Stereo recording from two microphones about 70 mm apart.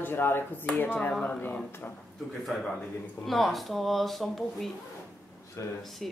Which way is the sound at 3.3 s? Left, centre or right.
Centre.